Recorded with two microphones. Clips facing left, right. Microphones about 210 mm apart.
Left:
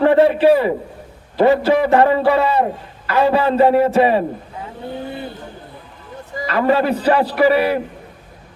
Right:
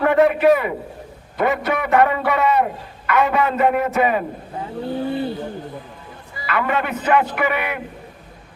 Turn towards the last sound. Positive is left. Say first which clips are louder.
# left 8 dB
turn(degrees=35)  # may be behind; listen again after turning